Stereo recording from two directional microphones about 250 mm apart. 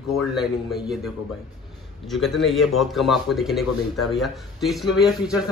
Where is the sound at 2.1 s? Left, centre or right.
Centre.